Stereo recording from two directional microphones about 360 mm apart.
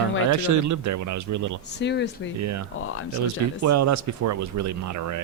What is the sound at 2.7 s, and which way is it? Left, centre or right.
Speech, left.